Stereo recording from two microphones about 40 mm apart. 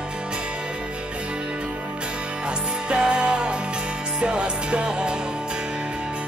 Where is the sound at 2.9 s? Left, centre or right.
Right.